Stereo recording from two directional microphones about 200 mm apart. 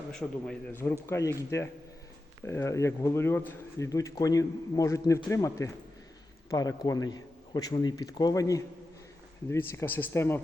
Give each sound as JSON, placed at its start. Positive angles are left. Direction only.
{"t": 0.1, "sound": "a man's voice", "side_deg": 5}